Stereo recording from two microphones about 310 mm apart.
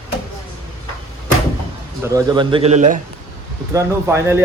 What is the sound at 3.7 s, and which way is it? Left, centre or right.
Speech, centre.